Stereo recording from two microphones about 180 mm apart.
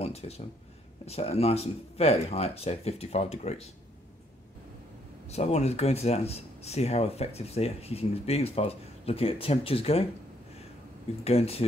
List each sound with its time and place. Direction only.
0.0 s a sound: 35° left (ahead or behind)
1.0 s speech: 35° left (ahead or behind)
5.3 s speech: 35° left (ahead or behind)
11.2 s speech: 35° left (ahead or behind)